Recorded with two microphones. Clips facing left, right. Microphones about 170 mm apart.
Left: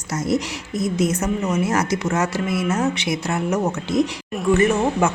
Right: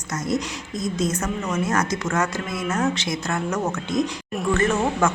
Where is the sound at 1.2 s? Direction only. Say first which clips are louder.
Left 4 dB; 20° left (ahead or behind).